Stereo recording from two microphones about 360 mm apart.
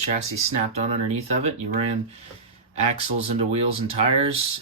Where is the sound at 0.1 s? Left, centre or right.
Centre.